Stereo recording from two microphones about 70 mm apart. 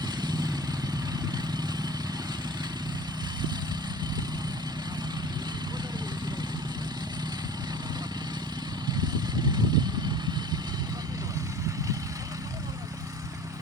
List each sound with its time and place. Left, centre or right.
0.2 s vehicle: right
9.8 s vehicle: right